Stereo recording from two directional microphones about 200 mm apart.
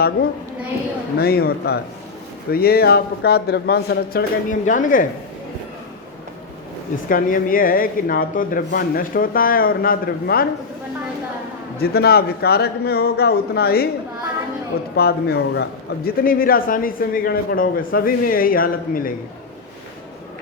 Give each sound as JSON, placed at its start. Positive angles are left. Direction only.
{"t": 1.2, "sound": "speech", "side_deg": 50}
{"t": 7.1, "sound": "speech", "side_deg": 45}
{"t": 11.8, "sound": "speech", "side_deg": 50}
{"t": 14.9, "sound": "speech", "side_deg": 50}